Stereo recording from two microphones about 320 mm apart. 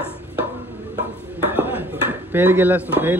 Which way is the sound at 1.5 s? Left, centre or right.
Centre.